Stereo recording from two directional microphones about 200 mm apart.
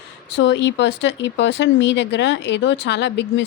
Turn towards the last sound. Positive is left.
turn(degrees=60)  # may be behind; listen again after turning